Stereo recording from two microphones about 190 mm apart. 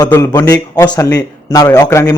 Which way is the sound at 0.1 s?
15° left (ahead or behind).